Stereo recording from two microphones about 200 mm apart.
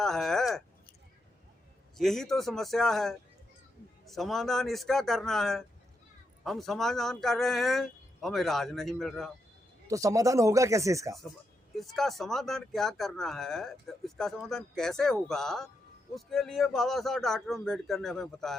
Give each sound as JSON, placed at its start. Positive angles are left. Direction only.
{"t": 0.0, "sound": "a sound", "side_deg": 0}
{"t": 2.0, "sound": "speech", "side_deg": 0}
{"t": 9.8, "sound": "speech", "side_deg": -15}
{"t": 11.8, "sound": "speech", "side_deg": 0}